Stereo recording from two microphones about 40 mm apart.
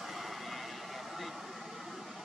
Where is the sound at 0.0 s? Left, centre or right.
Centre.